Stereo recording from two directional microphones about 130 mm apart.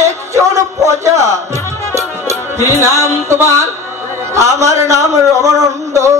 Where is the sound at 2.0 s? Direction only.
25° right (ahead or behind).